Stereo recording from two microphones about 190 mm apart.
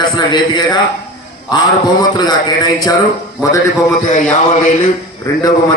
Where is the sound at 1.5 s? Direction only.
20° left (ahead or behind).